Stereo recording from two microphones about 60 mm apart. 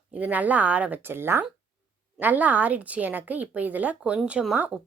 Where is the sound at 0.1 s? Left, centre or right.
Right.